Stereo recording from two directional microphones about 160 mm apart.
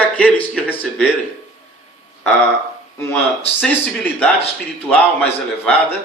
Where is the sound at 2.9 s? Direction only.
15° left (ahead or behind).